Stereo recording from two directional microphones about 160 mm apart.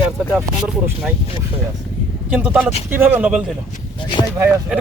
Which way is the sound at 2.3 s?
10° right (ahead or behind).